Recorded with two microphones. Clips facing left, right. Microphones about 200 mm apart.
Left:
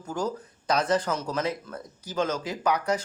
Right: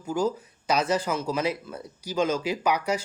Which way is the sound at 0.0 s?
10° right (ahead or behind).